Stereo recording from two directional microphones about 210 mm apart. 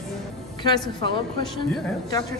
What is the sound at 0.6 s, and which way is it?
Speech, 20° left (ahead or behind).